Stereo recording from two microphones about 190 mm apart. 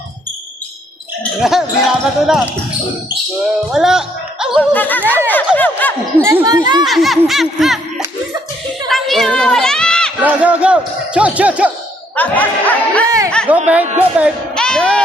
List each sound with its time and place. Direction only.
1.2 s speech: centre (ahead or behind)
3.7 s speech: 5° right (ahead or behind)
4.7 s speech: 10° left (ahead or behind)
6.2 s speech: 20° right (ahead or behind)
6.8 s speech: centre (ahead or behind)
8.9 s a sound: centre (ahead or behind)
10.2 s speech: 5° right (ahead or behind)
12.1 s speech: 10° left (ahead or behind)
13.1 s speech: 20° right (ahead or behind)
13.7 s speech: 5° right (ahead or behind)
14.5 s music: 5° left (ahead or behind)